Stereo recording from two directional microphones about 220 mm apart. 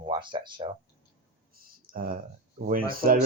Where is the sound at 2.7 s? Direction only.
40° right (ahead or behind).